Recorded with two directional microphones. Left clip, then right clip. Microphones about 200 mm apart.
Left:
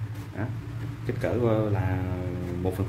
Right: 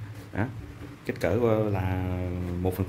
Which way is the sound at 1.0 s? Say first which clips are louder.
Right 1 dB; 35° right (ahead or behind).